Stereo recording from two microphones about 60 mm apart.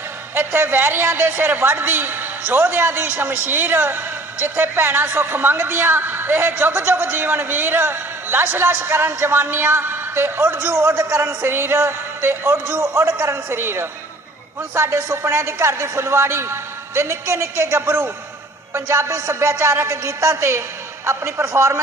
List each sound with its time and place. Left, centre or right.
0.3 s a woman's voice: right
12.8 s a woman's voice: right
14.8 s a woman's voice: right